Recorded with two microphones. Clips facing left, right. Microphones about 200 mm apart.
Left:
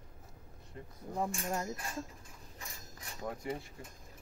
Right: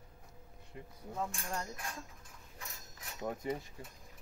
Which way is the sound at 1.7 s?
Centre (ahead or behind).